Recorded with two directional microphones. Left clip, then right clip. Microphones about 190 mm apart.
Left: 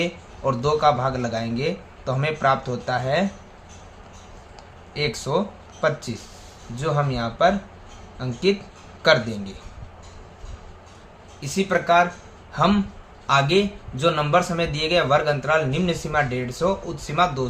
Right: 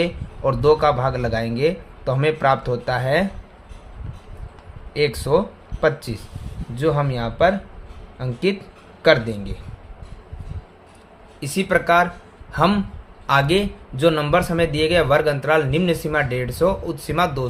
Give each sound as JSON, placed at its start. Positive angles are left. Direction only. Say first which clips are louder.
{"t": 0.0, "sound": "a man's voice", "louder": "right 3 dB", "side_deg": -35}
{"t": 4.9, "sound": "a man's voice", "louder": "right 5 dB", "side_deg": -35}
{"t": 6.7, "sound": "a man's voice", "louder": "right 3 dB", "side_deg": -30}
{"t": 11.3, "sound": "a man's voice", "louder": "right 3 dB", "side_deg": -45}